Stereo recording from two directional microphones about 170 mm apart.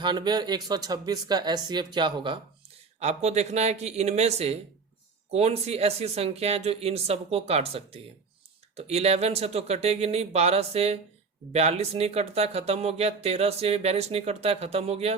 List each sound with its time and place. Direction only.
0.0 s speech: 25° right (ahead or behind)
3.0 s speech: 40° right (ahead or behind)